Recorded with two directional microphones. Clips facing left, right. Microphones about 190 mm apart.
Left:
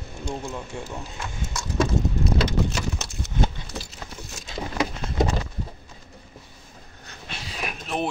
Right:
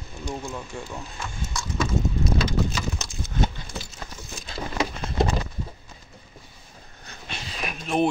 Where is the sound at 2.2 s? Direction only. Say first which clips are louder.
Left 1 dB; 60° left (ahead or behind).